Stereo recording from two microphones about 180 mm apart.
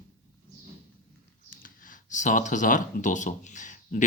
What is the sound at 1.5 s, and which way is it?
Speech, 50° left (ahead or behind).